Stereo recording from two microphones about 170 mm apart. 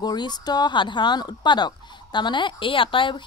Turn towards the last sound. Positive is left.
turn(degrees=30)  # may be behind; listen again after turning